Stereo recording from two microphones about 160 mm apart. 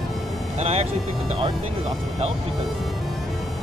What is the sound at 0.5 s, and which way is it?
Speech, 40° right (ahead or behind).